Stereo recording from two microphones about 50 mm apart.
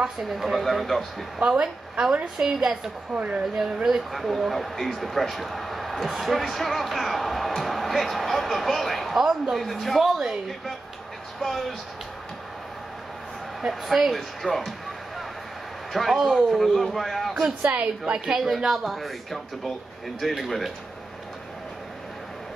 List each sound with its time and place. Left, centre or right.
0.2 s speech: centre
1.4 s a woman's voice: centre
3.2 s a woman's voice: right
3.5 s a woman's voice: centre
11.4 s speech: centre
13.6 s a woman's voice: centre
15.9 s speech: centre
17.3 s a woman's voice: centre
18.6 s speech: centre